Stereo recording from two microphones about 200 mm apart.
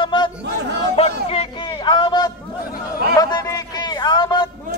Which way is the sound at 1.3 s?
25° left (ahead or behind).